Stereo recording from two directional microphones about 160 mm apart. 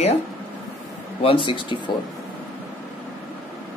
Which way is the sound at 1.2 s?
30° left (ahead or behind).